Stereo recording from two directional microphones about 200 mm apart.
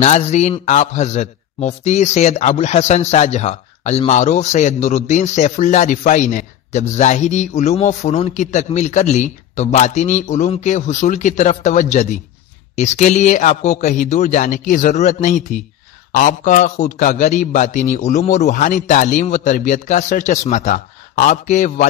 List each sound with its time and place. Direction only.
0.0 s a man's voice: 35° left (ahead or behind)